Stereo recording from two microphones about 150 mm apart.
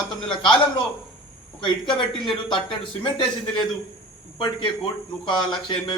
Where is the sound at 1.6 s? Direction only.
30° left (ahead or behind).